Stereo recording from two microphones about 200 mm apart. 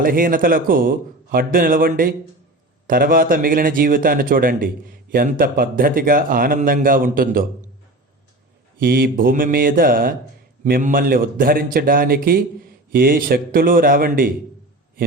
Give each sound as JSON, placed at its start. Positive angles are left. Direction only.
{"t": 0.0, "sound": "a man's voice", "side_deg": -45}
{"t": 8.8, "sound": "a man's voice", "side_deg": -45}